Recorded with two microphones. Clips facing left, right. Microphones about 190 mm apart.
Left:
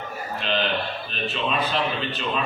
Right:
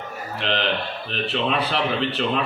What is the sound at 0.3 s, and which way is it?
A man's voice, 75° right (ahead or behind).